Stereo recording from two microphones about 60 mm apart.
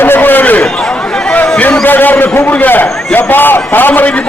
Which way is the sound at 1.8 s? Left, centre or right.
Left.